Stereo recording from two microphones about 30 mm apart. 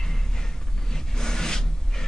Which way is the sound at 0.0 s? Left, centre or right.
Centre.